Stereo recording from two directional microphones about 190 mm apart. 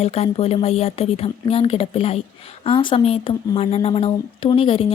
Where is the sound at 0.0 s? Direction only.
35° left (ahead or behind).